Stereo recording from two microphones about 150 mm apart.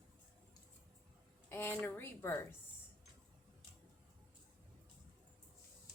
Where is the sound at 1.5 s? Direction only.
15° left (ahead or behind).